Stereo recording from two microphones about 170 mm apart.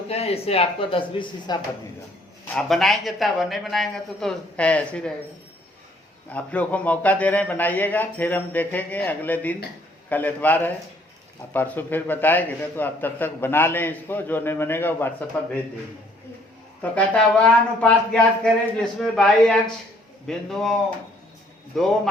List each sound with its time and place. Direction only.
0.1 s speech: 35° left (ahead or behind)
2.6 s speech: centre (ahead or behind)
6.3 s a man's voice: 10° left (ahead or behind)
16.9 s speech: 5° left (ahead or behind)
21.7 s speech: 5° left (ahead or behind)